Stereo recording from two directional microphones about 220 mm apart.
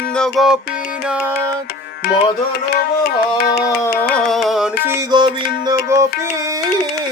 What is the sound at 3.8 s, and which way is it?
Music, 5° left (ahead or behind).